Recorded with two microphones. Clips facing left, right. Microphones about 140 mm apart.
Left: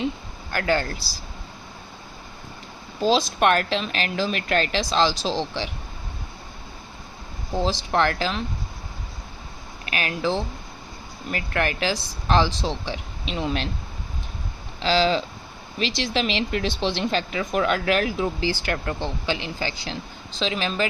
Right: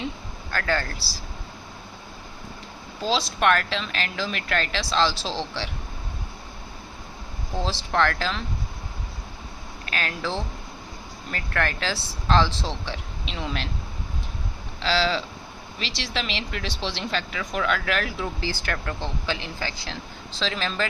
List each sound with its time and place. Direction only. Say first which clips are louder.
0.5 s speech: left 3 dB; 15° left (ahead or behind)
3.0 s speech: left 4 dB; 20° left (ahead or behind)
7.5 s speech: left 3 dB; 20° left (ahead or behind)
9.8 s speech: left 4 dB; 15° left (ahead or behind)
14.8 s speech: left 3 dB; 20° left (ahead or behind)